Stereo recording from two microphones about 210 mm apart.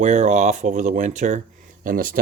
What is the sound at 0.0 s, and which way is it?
Speech, 35° right (ahead or behind).